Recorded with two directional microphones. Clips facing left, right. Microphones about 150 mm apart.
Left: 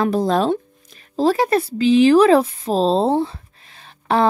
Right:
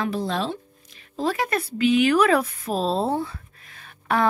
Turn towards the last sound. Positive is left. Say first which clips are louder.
# left 5 dB
turn(degrees=30)  # may be behind; listen again after turning